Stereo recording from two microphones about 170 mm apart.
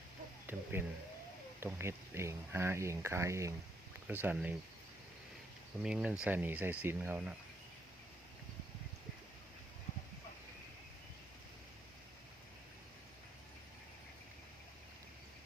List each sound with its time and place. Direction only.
0.4 s speech: 15° right (ahead or behind)
5.8 s speech: 5° right (ahead or behind)